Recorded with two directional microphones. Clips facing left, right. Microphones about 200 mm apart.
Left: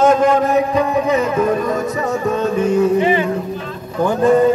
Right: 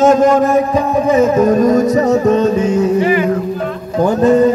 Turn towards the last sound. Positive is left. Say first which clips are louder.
# right 3 dB
turn(degrees=-40)  # may be behind; listen again after turning